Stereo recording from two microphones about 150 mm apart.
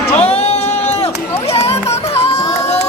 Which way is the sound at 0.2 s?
45° left (ahead or behind).